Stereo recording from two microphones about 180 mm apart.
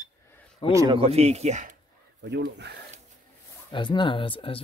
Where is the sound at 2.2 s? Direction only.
70° right (ahead or behind).